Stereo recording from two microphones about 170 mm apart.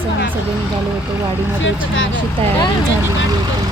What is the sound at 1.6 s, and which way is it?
Speech, 90° left.